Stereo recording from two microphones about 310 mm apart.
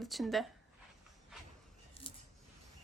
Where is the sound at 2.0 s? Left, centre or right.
Centre.